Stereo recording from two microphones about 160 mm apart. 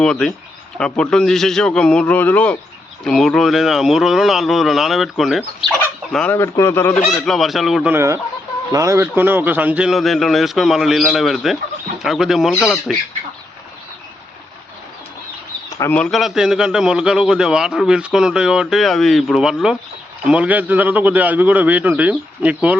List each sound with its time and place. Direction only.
0.0 s a man's voice: 5° left (ahead or behind)
6.3 s a man's voice: 15° left (ahead or behind)
7.1 s a man's voice: centre (ahead or behind)
7.9 s a man's voice: 20° right (ahead or behind); by 13.0 s 5° left (ahead or behind)
15.8 s a man's voice: 10° left (ahead or behind); by 22.8 s 10° right (ahead or behind)